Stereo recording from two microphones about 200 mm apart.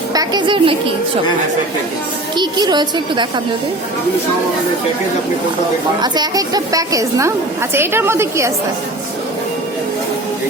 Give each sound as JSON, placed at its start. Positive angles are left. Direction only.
{"t": 0.1, "sound": "a woman's voice", "side_deg": -20}
{"t": 2.3, "sound": "a woman's voice", "side_deg": -20}
{"t": 6.0, "sound": "a woman's voice", "side_deg": -20}